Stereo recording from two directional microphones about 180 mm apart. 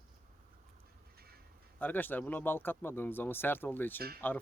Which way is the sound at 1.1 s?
60° right (ahead or behind).